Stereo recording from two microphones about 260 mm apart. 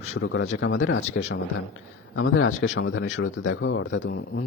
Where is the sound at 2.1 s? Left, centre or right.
Left.